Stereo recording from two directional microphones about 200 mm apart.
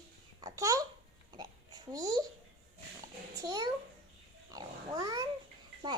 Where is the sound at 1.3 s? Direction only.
20° right (ahead or behind).